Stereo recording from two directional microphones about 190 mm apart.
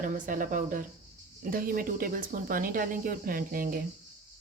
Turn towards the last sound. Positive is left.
turn(degrees=-50)  # may be behind; listen again after turning